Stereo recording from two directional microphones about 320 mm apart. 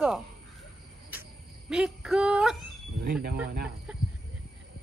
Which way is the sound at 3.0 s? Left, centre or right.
Right.